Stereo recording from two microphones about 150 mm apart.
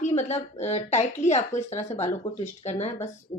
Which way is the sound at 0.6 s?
50° left (ahead or behind).